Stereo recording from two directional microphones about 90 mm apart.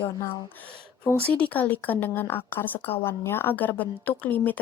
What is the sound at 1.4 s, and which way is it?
A woman's voice, 15° left (ahead or behind).